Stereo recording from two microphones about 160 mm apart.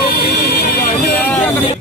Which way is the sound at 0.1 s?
70° left (ahead or behind).